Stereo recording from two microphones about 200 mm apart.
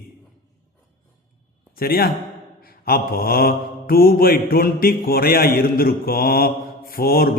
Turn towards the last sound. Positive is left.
turn(degrees=50)  # may be behind; listen again after turning